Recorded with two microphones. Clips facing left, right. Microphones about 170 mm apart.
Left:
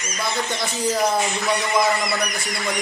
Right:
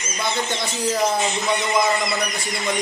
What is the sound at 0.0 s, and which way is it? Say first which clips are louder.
A man's voice: right 1 dB; 20° right (ahead or behind).